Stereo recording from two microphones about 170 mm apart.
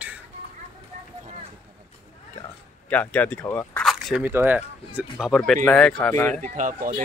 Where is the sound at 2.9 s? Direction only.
10° left (ahead or behind).